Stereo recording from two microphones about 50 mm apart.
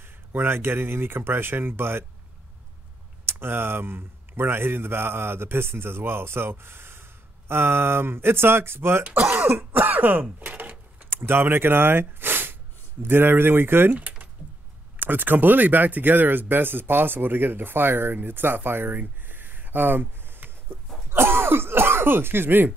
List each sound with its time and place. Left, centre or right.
0.0 s speech: right
3.3 s speech: right
9.3 s throat clearing: right
10.4 s a sound: right
11.1 s speech: right
13.9 s typing: right
15.0 s speech: right
21.1 s throat clearing: right